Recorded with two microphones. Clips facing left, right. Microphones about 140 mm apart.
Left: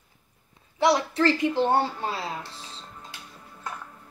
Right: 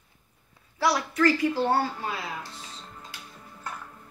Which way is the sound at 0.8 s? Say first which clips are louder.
Left 2 dB; 25° left (ahead or behind).